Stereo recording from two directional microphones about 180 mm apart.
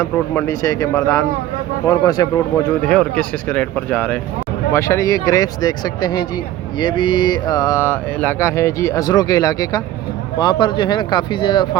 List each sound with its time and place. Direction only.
0.0 s speech: 15° left (ahead or behind)
2.9 s speech: 5° left (ahead or behind); by 11.8 s 25° left (ahead or behind)